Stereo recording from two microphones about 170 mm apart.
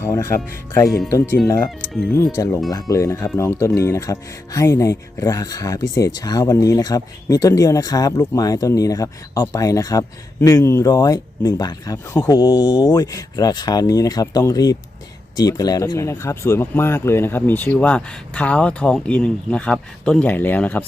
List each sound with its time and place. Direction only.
0.0 s speech: 15° left (ahead or behind)
1.9 s speech: centre (ahead or behind)
2.1 s speech: 15° left (ahead or behind)
12.4 s speech: 25° left (ahead or behind); by 20.8 s 10° left (ahead or behind)